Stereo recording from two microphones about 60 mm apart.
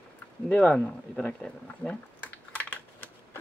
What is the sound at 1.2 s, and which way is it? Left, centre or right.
Typing, left.